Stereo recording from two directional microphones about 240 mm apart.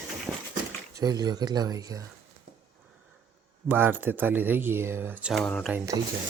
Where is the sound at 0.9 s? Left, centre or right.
Centre.